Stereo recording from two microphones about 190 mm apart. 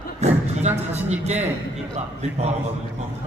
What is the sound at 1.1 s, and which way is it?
Speech, 35° right (ahead or behind).